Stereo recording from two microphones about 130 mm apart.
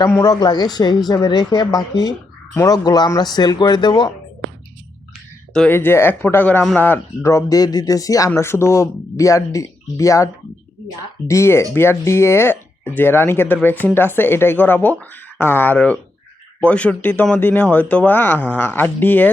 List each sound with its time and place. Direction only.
0.1 s a woman's voice: 30° left (ahead or behind)
5.5 s speech: 15° left (ahead or behind)
11.3 s speech: 20° left (ahead or behind)